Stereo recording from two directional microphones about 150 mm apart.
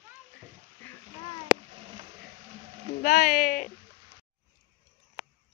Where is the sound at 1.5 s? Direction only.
5° right (ahead or behind).